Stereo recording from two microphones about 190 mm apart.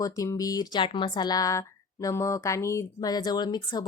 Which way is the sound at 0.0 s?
20° left (ahead or behind).